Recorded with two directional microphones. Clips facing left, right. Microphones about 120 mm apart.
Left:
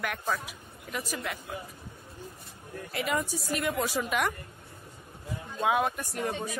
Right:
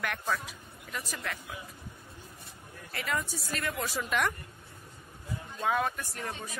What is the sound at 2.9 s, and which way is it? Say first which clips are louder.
A woman's voice: left 4 dB; 15° left (ahead or behind).